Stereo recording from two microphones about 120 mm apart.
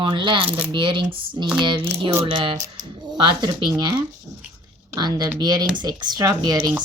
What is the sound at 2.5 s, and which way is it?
Speech, 25° right (ahead or behind).